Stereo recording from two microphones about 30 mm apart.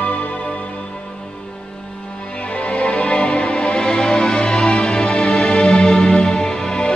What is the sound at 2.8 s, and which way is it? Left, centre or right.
Music, left.